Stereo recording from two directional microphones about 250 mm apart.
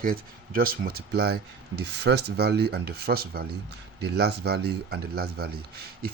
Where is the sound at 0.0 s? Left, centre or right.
Right.